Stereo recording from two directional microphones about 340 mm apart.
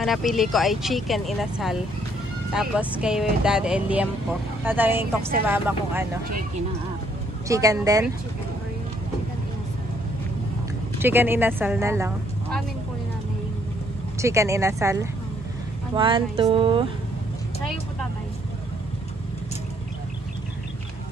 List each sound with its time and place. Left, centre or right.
0.0 s speech: centre
7.4 s a woman's voice: centre
11.0 s a woman's voice: centre
14.2 s a woman's voice: centre